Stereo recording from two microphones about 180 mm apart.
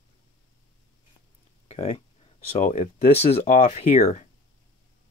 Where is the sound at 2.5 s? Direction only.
40° left (ahead or behind).